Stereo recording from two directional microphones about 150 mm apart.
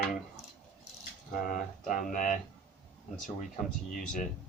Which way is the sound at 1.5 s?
65° left (ahead or behind).